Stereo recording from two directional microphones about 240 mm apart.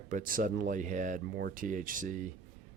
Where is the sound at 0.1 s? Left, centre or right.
Right.